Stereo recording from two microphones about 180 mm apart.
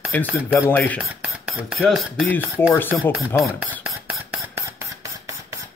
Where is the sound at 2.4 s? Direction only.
10° right (ahead or behind).